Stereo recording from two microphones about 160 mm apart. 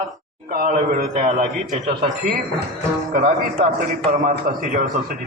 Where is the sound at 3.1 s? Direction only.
55° right (ahead or behind).